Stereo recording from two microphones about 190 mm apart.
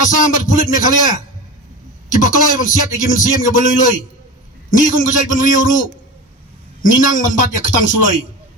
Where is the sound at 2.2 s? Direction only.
45° left (ahead or behind).